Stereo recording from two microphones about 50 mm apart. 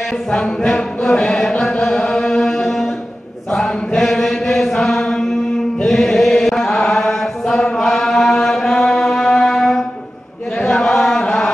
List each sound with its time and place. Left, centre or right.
0.3 s chant: centre